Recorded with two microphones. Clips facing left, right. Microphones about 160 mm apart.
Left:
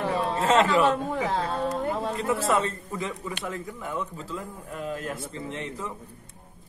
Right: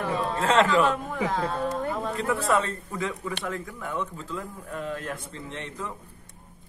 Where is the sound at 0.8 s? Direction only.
30° left (ahead or behind).